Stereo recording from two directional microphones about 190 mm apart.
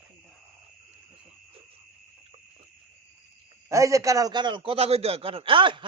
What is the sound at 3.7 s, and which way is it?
A man's voice, 15° right (ahead or behind).